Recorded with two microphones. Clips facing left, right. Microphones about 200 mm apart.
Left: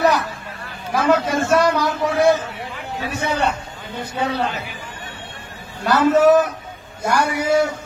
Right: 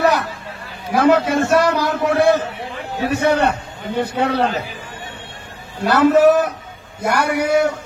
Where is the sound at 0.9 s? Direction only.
60° right (ahead or behind).